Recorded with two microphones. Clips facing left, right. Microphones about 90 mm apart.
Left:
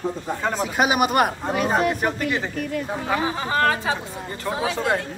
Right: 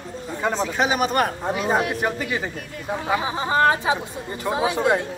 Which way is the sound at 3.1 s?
20° right (ahead or behind).